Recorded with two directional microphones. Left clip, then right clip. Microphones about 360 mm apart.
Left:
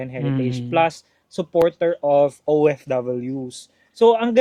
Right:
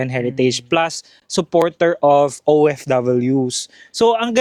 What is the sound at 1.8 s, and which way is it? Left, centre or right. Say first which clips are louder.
Speech: right 4 dB; right.